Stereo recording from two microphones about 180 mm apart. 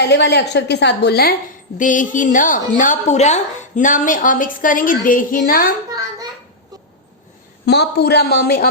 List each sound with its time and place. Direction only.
0.0 s a woman's voice: 70° left (ahead or behind)
1.8 s a woman's voice: 45° left (ahead or behind)
7.6 s a man's voice: 65° left (ahead or behind)